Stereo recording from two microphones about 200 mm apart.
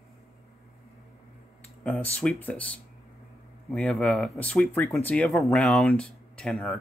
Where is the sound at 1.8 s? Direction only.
5° left (ahead or behind).